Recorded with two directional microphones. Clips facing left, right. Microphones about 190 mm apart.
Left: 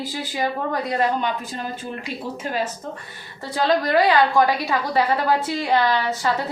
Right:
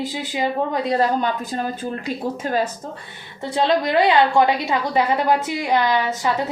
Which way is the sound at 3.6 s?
20° right (ahead or behind).